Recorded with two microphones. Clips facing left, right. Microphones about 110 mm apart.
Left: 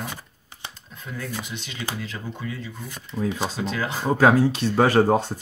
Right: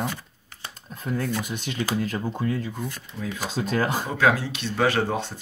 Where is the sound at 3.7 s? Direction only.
45° right (ahead or behind).